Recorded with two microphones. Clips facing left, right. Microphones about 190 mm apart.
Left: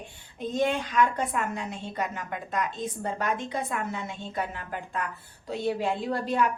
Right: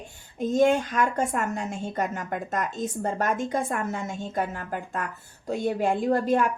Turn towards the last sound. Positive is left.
turn(degrees=-45)  # may be behind; listen again after turning